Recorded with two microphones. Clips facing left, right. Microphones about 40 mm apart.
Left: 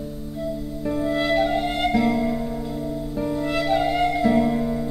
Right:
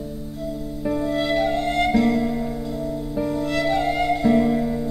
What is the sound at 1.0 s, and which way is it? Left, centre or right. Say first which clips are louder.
Music: left 2 dB; centre.